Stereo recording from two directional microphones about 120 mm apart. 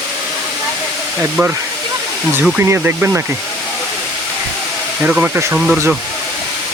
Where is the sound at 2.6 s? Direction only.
20° right (ahead or behind).